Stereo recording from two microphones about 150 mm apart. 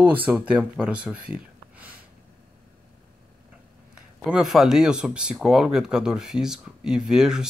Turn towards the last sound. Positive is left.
turn(degrees=-5)  # may be behind; listen again after turning